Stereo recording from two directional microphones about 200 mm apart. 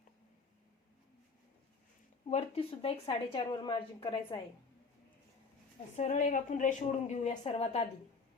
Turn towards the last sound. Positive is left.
turn(degrees=30)  # may be behind; listen again after turning